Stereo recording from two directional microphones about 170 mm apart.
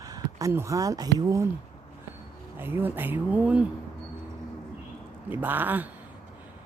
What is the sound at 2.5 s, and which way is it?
Speech, 15° right (ahead or behind).